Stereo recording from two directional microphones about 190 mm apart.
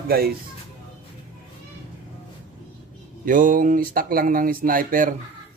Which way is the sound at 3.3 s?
45° right (ahead or behind).